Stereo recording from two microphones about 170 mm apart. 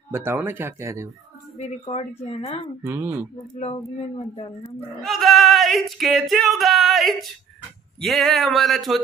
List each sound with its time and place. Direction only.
0.1 s speech: 15° right (ahead or behind)
1.6 s speech: 35° left (ahead or behind)
2.8 s speech: 15° right (ahead or behind)
3.5 s speech: 35° left (ahead or behind)
5.0 s a sound: centre (ahead or behind)